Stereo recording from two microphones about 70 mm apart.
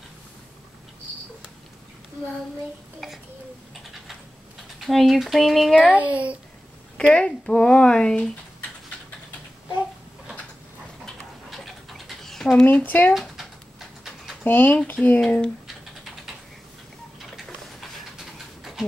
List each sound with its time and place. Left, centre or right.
3.0 s babbling: centre
4.7 s speech: centre
5.9 s a child's voice: centre
7.0 s speech: centre
11.5 s a sound: centre
12.6 s speech: left
13.1 s a sound: centre
14.4 s speech: left
15.1 s speech: centre
17.4 s a sound: centre